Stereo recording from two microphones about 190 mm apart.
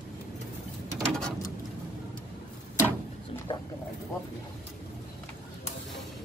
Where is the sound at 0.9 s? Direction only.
5° left (ahead or behind).